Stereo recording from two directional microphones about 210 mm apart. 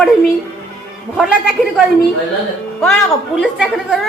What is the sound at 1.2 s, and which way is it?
A woman's voice, centre (ahead or behind).